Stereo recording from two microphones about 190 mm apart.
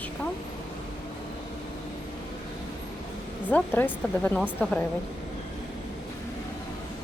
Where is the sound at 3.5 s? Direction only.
10° left (ahead or behind).